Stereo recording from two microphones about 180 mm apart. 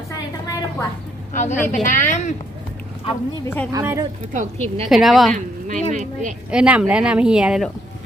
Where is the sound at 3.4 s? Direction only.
10° left (ahead or behind).